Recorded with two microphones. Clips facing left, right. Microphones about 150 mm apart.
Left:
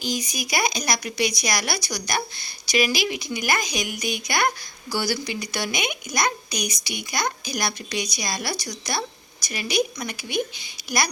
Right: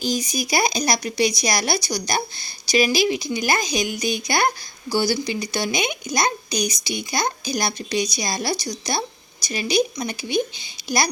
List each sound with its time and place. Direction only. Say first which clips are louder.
0.0 s a woman's voice: right 4 dB; 30° right (ahead or behind)